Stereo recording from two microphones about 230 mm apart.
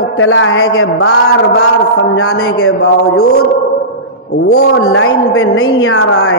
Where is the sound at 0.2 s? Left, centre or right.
Left.